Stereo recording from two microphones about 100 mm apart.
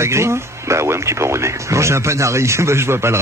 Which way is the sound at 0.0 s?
25° right (ahead or behind).